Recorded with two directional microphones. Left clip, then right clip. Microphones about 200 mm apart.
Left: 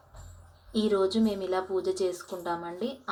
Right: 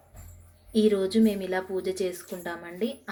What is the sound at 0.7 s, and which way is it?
Speech, 5° right (ahead or behind).